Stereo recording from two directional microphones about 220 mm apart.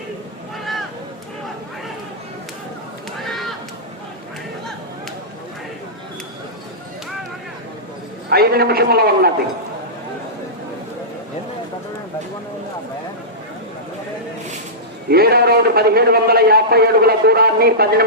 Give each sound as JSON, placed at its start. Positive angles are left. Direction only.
{"t": 0.6, "sound": "a sound", "side_deg": 0}
{"t": 3.2, "sound": "run", "side_deg": 0}
{"t": 8.3, "sound": "a man's voice", "side_deg": -45}
{"t": 15.1, "sound": "a man's voice", "side_deg": -45}